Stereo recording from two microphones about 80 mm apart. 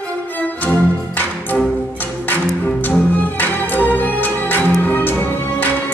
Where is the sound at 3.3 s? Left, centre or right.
Left.